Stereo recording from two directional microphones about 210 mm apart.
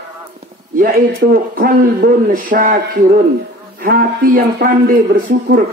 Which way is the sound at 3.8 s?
45° right (ahead or behind).